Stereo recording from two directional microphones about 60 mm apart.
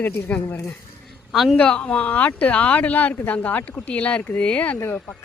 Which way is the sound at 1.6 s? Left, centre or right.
Centre.